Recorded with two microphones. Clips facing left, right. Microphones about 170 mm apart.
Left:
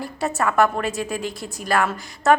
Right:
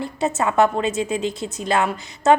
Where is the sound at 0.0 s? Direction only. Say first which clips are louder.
Right 2 dB; 20° right (ahead or behind).